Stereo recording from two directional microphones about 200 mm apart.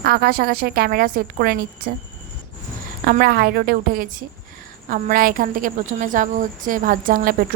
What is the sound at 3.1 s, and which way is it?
A woman's voice, 50° right (ahead or behind).